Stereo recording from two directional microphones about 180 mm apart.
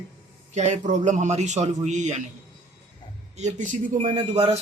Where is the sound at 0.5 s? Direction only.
40° right (ahead or behind).